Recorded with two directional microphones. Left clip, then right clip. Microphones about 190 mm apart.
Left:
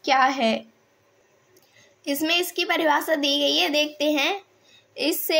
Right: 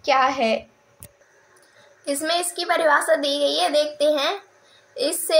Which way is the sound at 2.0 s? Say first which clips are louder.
Even; 60° left (ahead or behind).